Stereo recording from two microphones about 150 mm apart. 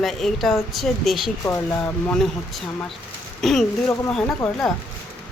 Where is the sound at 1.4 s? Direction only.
20° left (ahead or behind).